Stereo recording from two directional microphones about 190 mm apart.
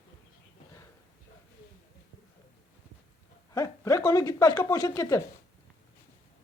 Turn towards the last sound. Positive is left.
turn(degrees=15)  # may be behind; listen again after turning